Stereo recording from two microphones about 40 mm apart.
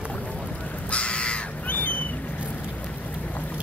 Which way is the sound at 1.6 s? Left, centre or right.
Left.